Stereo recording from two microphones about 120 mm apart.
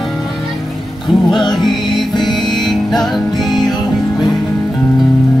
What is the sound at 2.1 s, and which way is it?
Music, 40° left (ahead or behind).